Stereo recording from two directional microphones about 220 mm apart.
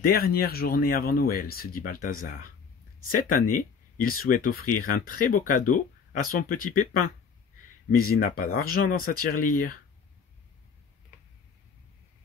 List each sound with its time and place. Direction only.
0.0 s speech: 45° left (ahead or behind)
7.9 s speech: 40° left (ahead or behind)